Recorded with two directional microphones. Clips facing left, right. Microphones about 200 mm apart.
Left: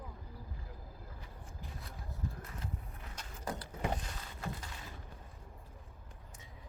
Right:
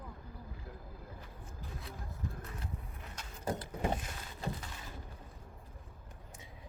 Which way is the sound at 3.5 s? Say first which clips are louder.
Right 3 dB; 20° right (ahead or behind).